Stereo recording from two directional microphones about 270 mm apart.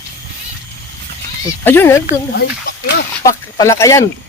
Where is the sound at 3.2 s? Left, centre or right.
Centre.